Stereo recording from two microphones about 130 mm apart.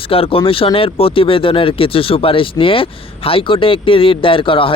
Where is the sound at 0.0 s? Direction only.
45° left (ahead or behind).